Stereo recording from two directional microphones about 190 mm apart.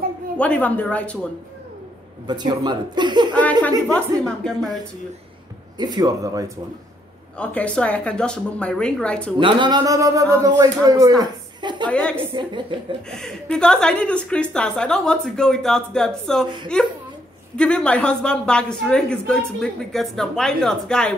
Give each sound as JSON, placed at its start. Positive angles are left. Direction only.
{"t": 0.4, "sound": "a woman's voice", "side_deg": 10}
{"t": 2.2, "sound": "speech", "side_deg": -20}
{"t": 4.2, "sound": "speech", "side_deg": 0}
{"t": 5.8, "sound": "speech", "side_deg": -20}
{"t": 7.3, "sound": "speech", "side_deg": 5}
{"t": 9.4, "sound": "speech", "side_deg": -25}
{"t": 11.9, "sound": "speech", "side_deg": 5}
{"t": 12.4, "sound": "speech", "side_deg": -25}
{"t": 13.1, "sound": "speech", "side_deg": 5}